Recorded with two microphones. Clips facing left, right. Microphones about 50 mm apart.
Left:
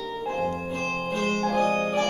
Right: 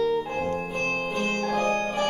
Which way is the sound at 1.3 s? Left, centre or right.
Centre.